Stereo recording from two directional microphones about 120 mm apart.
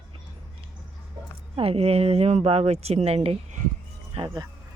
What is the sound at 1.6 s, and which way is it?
Speech, 55° right (ahead or behind).